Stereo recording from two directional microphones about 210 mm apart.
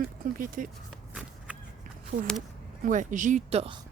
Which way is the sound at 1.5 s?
5° right (ahead or behind).